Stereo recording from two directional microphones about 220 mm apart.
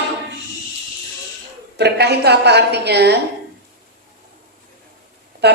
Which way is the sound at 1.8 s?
50° right (ahead or behind).